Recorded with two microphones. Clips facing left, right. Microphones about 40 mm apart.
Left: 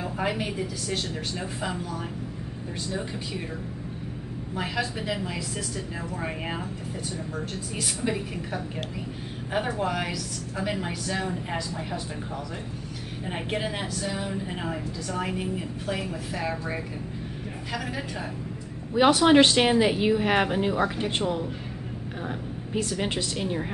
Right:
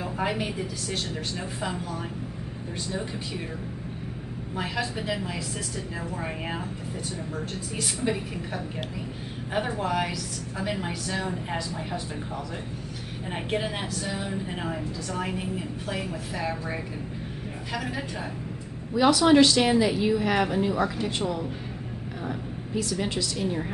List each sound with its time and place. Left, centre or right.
0.0 s a woman's voice: centre
4.6 s a woman's voice: centre
7.3 s a woman's voice: centre
13.3 s a woman's voice: centre
18.9 s speech: left
22.8 s speech: left